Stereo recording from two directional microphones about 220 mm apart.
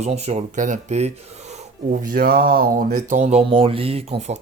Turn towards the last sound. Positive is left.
turn(degrees=-25)  # may be behind; listen again after turning